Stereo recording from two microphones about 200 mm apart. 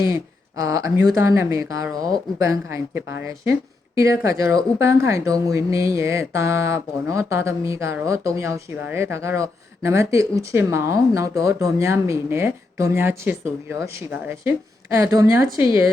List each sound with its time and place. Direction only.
0.1 s speech: 15° right (ahead or behind)
4.2 s speech: 15° right (ahead or behind)